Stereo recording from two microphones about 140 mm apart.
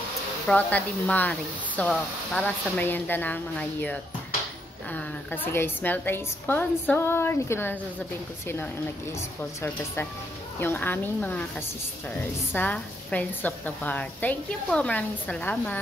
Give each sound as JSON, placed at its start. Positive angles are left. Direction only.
{"t": 0.5, "sound": "speech", "side_deg": 10}
{"t": 12.5, "sound": "speech", "side_deg": 10}